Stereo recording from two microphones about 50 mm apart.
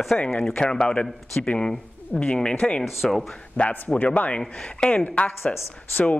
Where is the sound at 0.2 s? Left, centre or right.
Left.